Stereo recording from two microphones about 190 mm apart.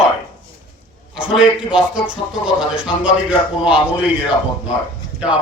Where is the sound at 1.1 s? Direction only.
5° right (ahead or behind).